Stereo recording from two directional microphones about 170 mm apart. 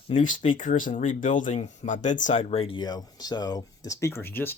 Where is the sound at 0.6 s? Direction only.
50° left (ahead or behind); by 4.6 s 15° left (ahead or behind).